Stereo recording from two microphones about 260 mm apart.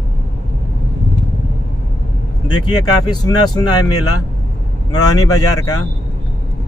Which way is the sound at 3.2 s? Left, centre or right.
Centre.